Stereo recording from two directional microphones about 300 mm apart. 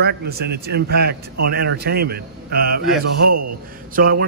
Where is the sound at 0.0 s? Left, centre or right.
Right.